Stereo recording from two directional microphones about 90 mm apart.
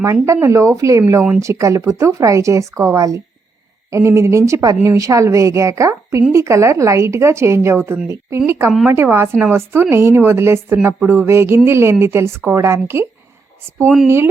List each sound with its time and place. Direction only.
0.0 s a woman's voice: 35° right (ahead or behind)